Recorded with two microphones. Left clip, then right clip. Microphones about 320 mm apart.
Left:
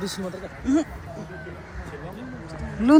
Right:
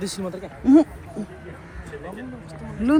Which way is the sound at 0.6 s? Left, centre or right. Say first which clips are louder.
Right 8 dB; centre.